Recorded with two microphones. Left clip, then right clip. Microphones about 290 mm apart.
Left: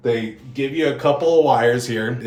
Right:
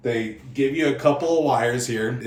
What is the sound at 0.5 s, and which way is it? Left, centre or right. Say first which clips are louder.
Speech: left 1 dB; centre.